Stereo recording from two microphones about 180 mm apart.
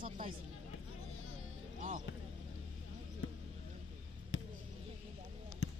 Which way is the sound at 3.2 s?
90° left.